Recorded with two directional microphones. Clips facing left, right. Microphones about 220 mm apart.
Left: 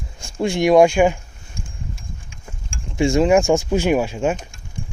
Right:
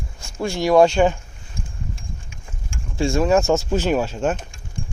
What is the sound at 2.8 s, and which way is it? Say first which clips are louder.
Speech: left 3 dB; 15° left (ahead or behind).